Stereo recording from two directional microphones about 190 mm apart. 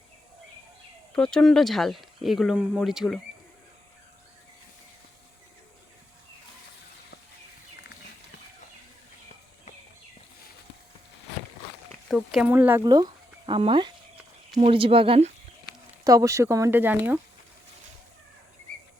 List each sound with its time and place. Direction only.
1.1 s speech: 5° left (ahead or behind)
11.9 s speech: centre (ahead or behind); by 15.3 s 30° right (ahead or behind)
16.0 s speech: 15° right (ahead or behind)